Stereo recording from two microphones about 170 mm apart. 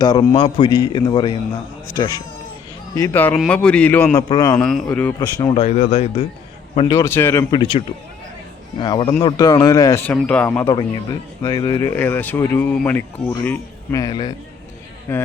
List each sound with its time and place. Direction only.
0.0 s a man's voice: 25° left (ahead or behind)
3.3 s a man's voice: centre (ahead or behind); by 4.6 s 20° left (ahead or behind)
4.6 s a man's voice: centre (ahead or behind)
5.4 s speech: 30° left (ahead or behind)
6.9 s speech: 15° left (ahead or behind)
7.5 s a man's voice: 30° left (ahead or behind); by 10.7 s 10° left (ahead or behind)
10.7 s a man's voice: 20° left (ahead or behind)
11.9 s speech: 10° left (ahead or behind)
14.0 s a man's voice: 25° left (ahead or behind)
15.1 s speech: 10° left (ahead or behind)